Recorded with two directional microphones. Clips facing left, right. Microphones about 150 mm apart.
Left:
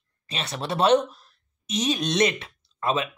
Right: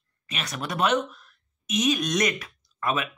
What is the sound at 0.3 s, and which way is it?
Speech, 30° left (ahead or behind).